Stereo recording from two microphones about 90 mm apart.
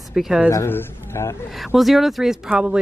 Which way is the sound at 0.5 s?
30° left (ahead or behind).